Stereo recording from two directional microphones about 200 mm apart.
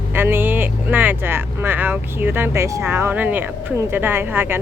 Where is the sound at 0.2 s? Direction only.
10° right (ahead or behind).